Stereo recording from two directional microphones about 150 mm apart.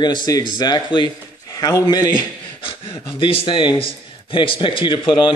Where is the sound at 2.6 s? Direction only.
35° left (ahead or behind).